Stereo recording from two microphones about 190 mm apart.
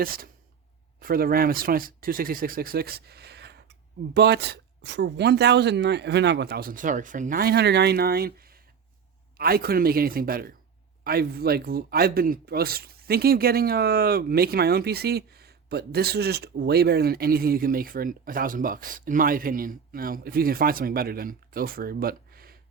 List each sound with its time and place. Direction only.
0.0 s speech: 50° right (ahead or behind)